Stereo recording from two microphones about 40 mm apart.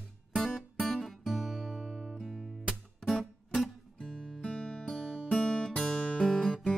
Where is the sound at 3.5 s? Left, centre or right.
Centre.